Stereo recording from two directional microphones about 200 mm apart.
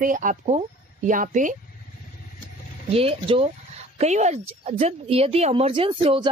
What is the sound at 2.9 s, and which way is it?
Speech, 30° right (ahead or behind).